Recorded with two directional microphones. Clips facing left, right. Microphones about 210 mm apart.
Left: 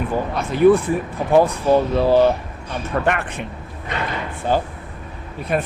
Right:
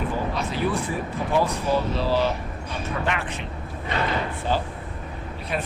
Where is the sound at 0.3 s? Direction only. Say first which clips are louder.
Left 16 dB; 55° left (ahead or behind).